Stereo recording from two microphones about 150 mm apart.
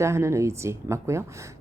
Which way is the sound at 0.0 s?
20° right (ahead or behind).